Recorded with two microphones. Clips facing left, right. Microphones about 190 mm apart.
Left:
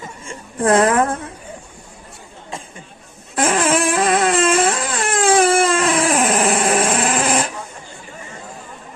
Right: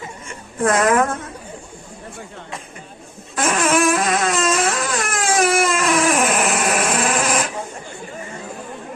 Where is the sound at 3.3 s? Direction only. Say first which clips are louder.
Left 1 dB; 30° left (ahead or behind).